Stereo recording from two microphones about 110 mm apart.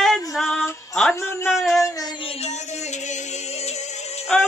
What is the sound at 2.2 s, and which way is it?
Music, 85° left.